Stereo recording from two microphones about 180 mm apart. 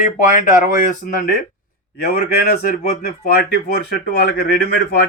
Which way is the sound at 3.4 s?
65° left (ahead or behind).